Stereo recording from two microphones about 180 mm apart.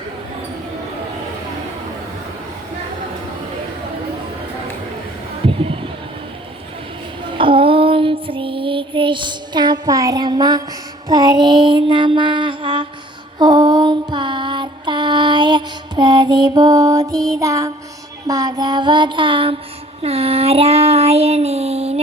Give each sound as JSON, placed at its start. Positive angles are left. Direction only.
{"t": 7.3, "sound": "female singing", "side_deg": -30}
{"t": 11.1, "sound": "mantra", "side_deg": -25}
{"t": 13.4, "sound": "music", "side_deg": -25}
{"t": 18.3, "sound": "mantra", "side_deg": -20}
{"t": 20.0, "sound": "child singing", "side_deg": -35}